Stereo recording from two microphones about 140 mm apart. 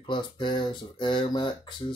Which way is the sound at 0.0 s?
35° left (ahead or behind).